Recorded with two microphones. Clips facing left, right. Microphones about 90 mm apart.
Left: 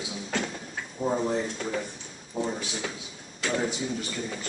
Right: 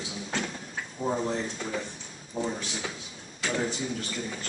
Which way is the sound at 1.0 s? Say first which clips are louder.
Left 2 dB; 5° left (ahead or behind).